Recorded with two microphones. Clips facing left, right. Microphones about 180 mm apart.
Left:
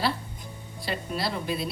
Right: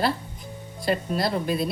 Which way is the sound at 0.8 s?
45° right (ahead or behind).